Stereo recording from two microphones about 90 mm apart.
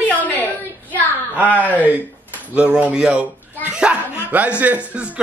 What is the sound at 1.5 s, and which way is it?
A man's voice, 20° right (ahead or behind).